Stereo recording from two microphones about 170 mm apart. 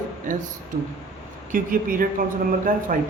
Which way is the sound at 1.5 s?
55° right (ahead or behind).